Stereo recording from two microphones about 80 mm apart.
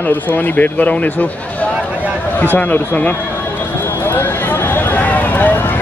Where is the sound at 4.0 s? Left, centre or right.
Left.